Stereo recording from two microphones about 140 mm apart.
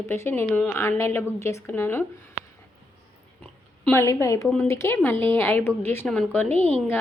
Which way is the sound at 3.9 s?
20° left (ahead or behind).